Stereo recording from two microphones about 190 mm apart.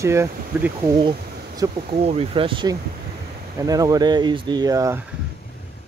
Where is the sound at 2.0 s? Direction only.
30° right (ahead or behind).